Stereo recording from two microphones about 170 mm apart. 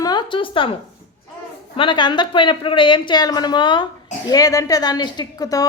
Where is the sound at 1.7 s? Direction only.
30° left (ahead or behind).